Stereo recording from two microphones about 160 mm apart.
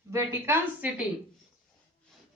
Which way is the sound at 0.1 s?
15° right (ahead or behind).